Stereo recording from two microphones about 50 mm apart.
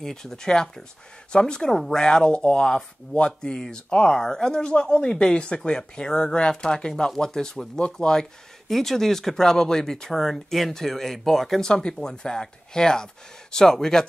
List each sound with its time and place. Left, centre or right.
0.0 s speech: centre